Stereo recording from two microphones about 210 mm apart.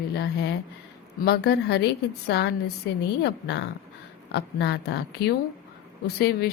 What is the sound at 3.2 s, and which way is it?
A woman's voice, 55° left (ahead or behind).